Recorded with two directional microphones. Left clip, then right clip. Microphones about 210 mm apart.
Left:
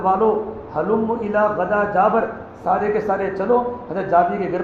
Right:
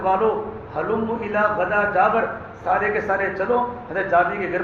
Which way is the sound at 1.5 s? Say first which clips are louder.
Left 1 dB; 25° left (ahead or behind).